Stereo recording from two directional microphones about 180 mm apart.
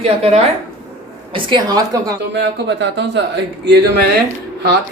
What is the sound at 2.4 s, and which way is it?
Speech, 75° right (ahead or behind).